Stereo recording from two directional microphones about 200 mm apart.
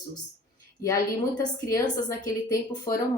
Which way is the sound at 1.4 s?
15° left (ahead or behind).